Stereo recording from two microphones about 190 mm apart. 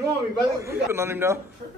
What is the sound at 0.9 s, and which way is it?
Speech, 15° right (ahead or behind).